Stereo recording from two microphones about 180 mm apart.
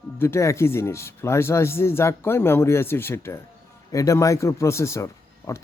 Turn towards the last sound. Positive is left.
turn(degrees=15)  # may be behind; listen again after turning